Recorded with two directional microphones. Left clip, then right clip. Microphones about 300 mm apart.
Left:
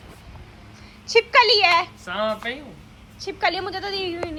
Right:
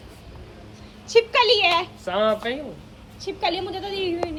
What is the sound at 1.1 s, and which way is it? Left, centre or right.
Speech, left.